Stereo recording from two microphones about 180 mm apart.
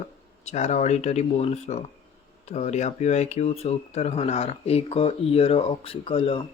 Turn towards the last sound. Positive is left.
turn(degrees=30)  # may be behind; listen again after turning